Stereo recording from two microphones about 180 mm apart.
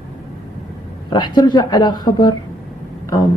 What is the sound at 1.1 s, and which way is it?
A woman's voice, 25° left (ahead or behind).